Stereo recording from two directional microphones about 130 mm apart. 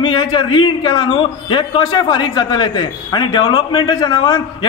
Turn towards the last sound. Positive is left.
turn(degrees=35)  # may be behind; listen again after turning